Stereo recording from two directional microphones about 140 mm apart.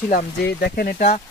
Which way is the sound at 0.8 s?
75° left (ahead or behind).